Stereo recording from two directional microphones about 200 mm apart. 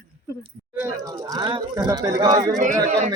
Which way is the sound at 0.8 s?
15° right (ahead or behind).